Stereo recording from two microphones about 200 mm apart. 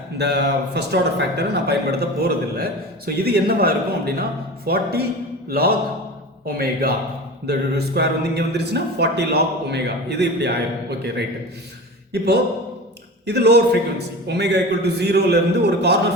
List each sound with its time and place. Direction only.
0.2 s a man's voice: 55° right (ahead or behind)
12.1 s a man's voice: 55° right (ahead or behind)